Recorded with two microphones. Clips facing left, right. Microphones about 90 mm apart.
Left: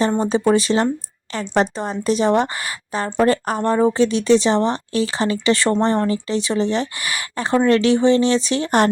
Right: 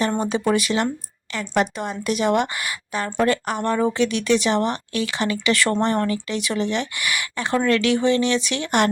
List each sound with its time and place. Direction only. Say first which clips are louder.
0.2 s speech: left 4 dB; 30° left (ahead or behind)